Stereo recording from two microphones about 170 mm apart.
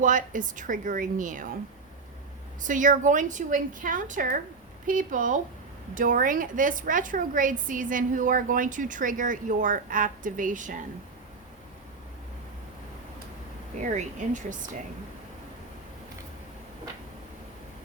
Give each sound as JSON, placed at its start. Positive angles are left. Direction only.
{"t": 0.0, "sound": "a woman's voice", "side_deg": -50}
{"t": 2.6, "sound": "a woman's voice", "side_deg": -50}
{"t": 13.7, "sound": "a woman's voice", "side_deg": -45}